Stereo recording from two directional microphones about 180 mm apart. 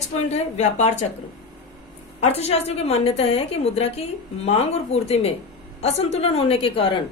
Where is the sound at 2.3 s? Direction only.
35° left (ahead or behind).